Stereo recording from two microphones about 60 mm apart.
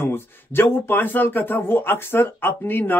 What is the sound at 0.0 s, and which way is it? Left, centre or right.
Speech, left.